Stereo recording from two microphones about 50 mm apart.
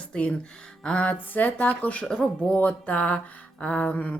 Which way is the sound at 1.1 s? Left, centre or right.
Left.